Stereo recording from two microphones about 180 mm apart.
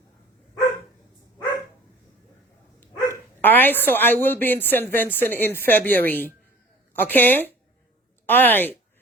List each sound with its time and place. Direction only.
3.4 s a woman's voice: 10° left (ahead or behind)